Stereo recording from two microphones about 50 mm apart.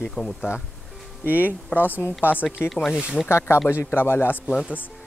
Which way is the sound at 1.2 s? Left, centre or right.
Right.